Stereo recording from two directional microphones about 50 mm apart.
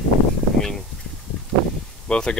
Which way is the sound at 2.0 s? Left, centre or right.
Centre.